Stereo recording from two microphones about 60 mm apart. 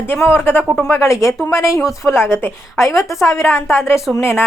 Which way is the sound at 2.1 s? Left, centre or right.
Left.